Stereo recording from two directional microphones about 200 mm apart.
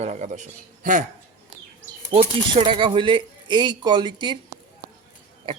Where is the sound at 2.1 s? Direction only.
25° right (ahead or behind).